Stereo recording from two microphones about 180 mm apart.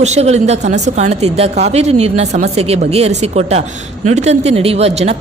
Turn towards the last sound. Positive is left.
turn(degrees=-35)  # may be behind; listen again after turning